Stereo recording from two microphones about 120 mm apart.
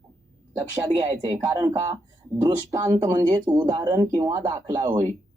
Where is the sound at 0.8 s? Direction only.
35° right (ahead or behind).